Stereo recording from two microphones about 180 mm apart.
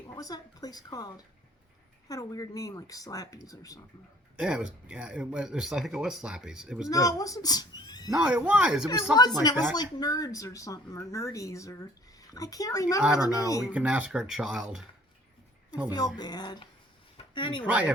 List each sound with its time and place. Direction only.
0.1 s speech: 20° left (ahead or behind)
4.4 s speech: 5° right (ahead or behind)
6.8 s speech: 20° left (ahead or behind)
8.1 s speech: 5° right (ahead or behind)
9.1 s speech: 20° left (ahead or behind)
13.0 s speech: 5° right (ahead or behind)
13.2 s speech: 20° left (ahead or behind)
13.7 s speech: 5° right (ahead or behind)
16.1 s speech: 25° left (ahead or behind)
17.2 s a sound: 25° left (ahead or behind)
17.7 s speech: 5° right (ahead or behind)